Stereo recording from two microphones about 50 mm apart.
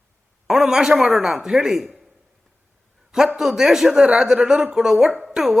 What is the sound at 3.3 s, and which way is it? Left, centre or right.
A man's voice, centre.